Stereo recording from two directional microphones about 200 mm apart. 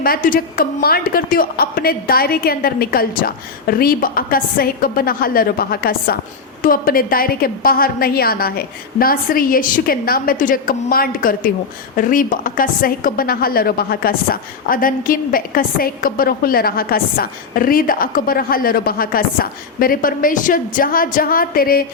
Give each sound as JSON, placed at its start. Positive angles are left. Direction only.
{"t": 0.0, "sound": "a woman's voice", "side_deg": 45}